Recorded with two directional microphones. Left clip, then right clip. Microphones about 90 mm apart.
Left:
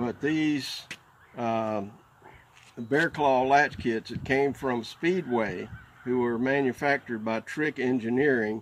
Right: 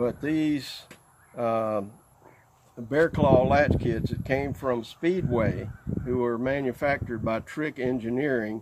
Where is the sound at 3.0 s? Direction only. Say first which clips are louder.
Right 3 dB; 30° right (ahead or behind).